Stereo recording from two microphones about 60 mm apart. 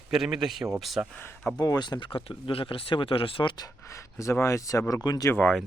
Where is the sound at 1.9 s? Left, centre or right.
Left.